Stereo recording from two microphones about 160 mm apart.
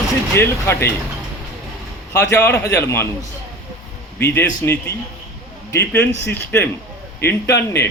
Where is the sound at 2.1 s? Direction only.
20° left (ahead or behind).